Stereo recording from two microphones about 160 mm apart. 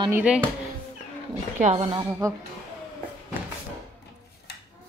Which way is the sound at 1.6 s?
45° right (ahead or behind).